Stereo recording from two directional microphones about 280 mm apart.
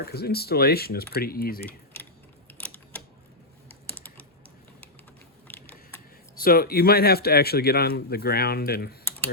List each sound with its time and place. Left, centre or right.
0.0 s speech: left
2.6 s typewriter: centre
5.5 s a sound: centre
6.4 s speech: left